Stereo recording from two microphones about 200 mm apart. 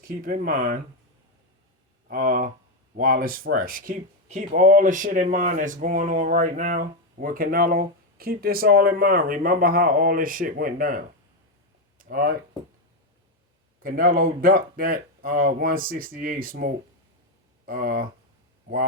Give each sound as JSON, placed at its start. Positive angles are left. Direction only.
{"t": 0.0, "sound": "speech", "side_deg": -45}
{"t": 2.0, "sound": "speech", "side_deg": -45}
{"t": 11.9, "sound": "a sound", "side_deg": -45}
{"t": 13.8, "sound": "speech", "side_deg": -45}